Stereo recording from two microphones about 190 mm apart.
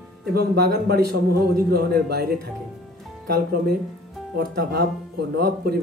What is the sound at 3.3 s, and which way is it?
Speech, 55° right (ahead or behind).